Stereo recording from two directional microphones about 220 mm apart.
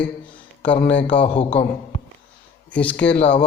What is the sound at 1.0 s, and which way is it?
Speech, 25° left (ahead or behind).